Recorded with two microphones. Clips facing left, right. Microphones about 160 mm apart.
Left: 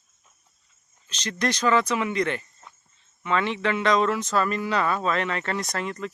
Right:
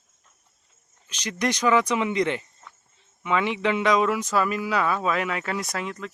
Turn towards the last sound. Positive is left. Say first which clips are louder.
# left 1 dB
turn(degrees=0)  # may be behind; listen again after turning